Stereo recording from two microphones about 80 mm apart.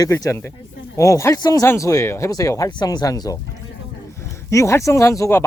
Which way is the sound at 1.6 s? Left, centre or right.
Left.